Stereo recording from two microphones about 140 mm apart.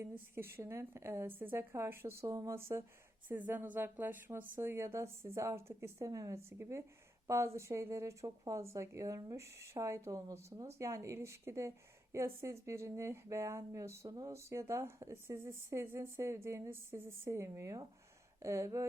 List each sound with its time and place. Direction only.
0.0 s a woman's voice: 15° right (ahead or behind)